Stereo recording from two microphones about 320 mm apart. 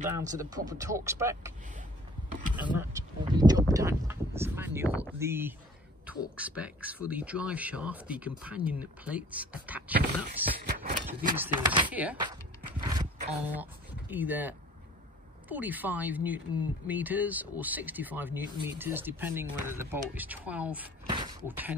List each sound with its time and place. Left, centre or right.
0.0 s speech: centre
2.5 s speech: centre
9.9 s speech: right
11.2 s speech: centre
12.8 s zipper: centre
15.4 s speech: centre